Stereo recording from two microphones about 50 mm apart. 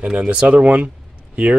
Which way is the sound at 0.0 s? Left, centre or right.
Right.